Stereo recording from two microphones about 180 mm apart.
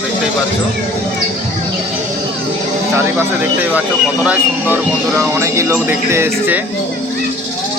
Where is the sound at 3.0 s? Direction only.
10° right (ahead or behind).